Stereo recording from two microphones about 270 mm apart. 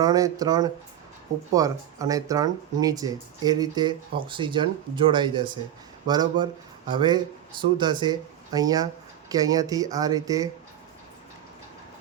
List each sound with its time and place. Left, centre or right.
0.0 s speech: centre